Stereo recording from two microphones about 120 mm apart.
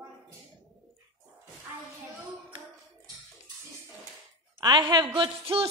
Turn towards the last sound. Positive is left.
turn(degrees=-50)  # may be behind; listen again after turning